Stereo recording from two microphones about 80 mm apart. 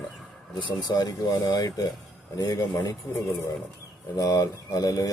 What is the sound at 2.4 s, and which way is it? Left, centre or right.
Speech, left.